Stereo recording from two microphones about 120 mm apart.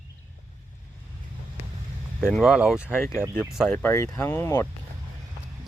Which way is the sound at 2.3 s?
5° right (ahead or behind).